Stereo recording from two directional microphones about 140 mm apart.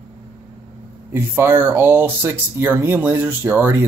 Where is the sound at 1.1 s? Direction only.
15° right (ahead or behind).